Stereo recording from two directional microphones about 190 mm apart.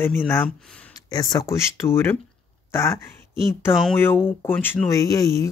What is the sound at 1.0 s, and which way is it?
Speech, 20° left (ahead or behind).